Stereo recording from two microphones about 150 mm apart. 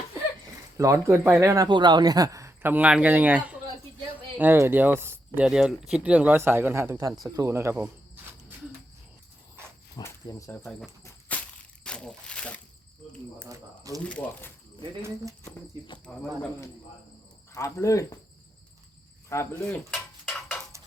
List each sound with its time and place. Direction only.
0.8 s speech: 20° right (ahead or behind)
2.6 s speech: 10° right (ahead or behind)
7.3 s cricket: 20° right (ahead or behind)
10.0 s speech: 20° left (ahead or behind)
11.3 s crushing: 10° left (ahead or behind)
11.8 s a sound: 5° left (ahead or behind)
13.5 s speech: 25° right (ahead or behind)
14.0 s speech: 10° left (ahead or behind)
15.0 s speech: 20° right (ahead or behind)
16.1 s speech: 5° left (ahead or behind)
17.5 s speech: 20° left (ahead or behind)
19.3 s speech: 20° left (ahead or behind)
19.9 s a sound: 5° left (ahead or behind)